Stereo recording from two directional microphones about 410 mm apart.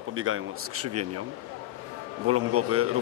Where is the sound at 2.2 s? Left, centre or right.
Right.